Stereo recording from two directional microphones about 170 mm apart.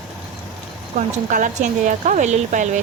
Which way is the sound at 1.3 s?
50° right (ahead or behind).